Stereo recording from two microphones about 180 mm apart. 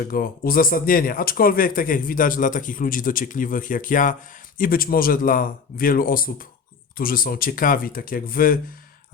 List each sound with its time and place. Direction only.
0.1 s speech: 55° left (ahead or behind)